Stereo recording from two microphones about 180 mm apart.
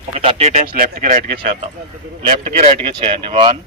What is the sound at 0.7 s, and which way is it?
Speech, 55° right (ahead or behind).